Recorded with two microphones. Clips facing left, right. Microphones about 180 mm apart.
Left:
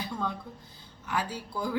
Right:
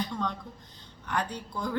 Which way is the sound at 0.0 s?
5° left (ahead or behind).